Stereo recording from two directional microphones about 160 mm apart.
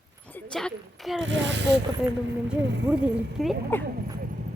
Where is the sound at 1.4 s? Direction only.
90° right.